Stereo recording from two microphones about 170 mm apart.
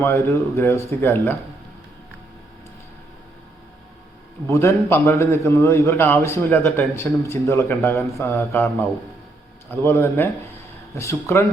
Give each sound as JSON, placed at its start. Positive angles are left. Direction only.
{"t": 0.0, "sound": "a man's voice", "side_deg": 15}
{"t": 4.4, "sound": "a man's voice", "side_deg": 15}
{"t": 9.8, "sound": "a man's voice", "side_deg": 15}